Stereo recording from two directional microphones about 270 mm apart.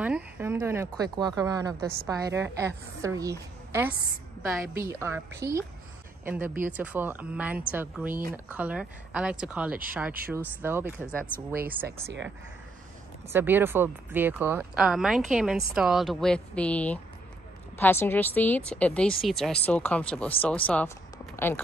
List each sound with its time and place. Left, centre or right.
0.0 s speech: centre
1.8 s speech: right
2.0 s speech: centre
11.3 s speech: right
13.3 s a woman's voice: centre